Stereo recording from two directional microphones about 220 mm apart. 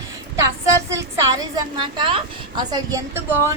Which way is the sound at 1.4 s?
20° right (ahead or behind).